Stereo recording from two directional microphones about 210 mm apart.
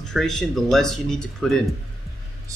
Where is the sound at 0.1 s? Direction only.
Centre (ahead or behind).